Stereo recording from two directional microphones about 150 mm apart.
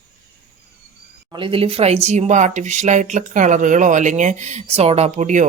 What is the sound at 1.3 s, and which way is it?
Speech, 35° right (ahead or behind).